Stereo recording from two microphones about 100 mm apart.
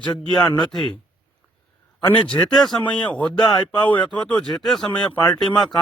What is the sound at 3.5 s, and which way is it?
Speech, 45° left (ahead or behind).